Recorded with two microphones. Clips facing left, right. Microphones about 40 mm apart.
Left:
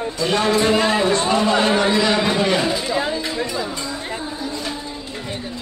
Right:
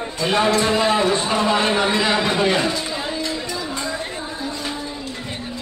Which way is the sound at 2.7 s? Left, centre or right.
Left.